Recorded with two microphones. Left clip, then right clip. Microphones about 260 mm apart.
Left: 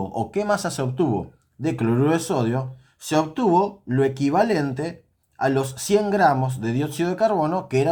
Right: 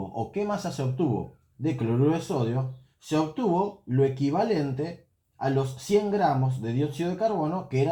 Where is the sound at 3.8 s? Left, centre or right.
Left.